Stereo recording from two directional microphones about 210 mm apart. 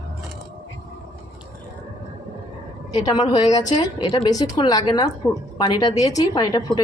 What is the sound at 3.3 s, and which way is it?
A woman's voice, 20° left (ahead or behind).